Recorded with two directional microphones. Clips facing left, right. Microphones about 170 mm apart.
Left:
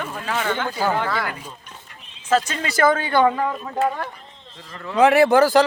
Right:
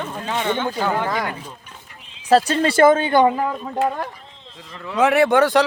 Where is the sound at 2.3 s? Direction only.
35° right (ahead or behind); by 3.5 s 15° right (ahead or behind).